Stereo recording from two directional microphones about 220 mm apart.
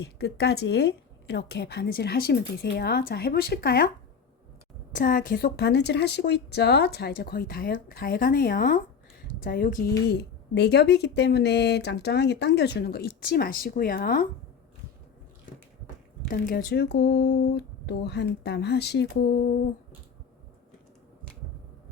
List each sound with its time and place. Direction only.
0.0 s speech: 45° left (ahead or behind)
10.1 s speech: 50° left (ahead or behind)
16.3 s speech: 40° left (ahead or behind)